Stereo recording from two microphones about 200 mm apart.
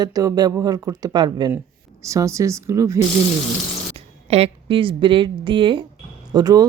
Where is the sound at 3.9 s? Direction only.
30° right (ahead or behind).